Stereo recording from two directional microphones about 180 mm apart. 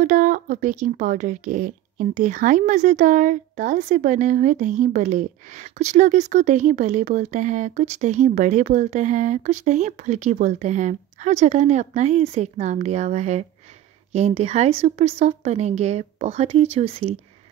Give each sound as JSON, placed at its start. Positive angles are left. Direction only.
{"t": 0.0, "sound": "speech", "side_deg": -45}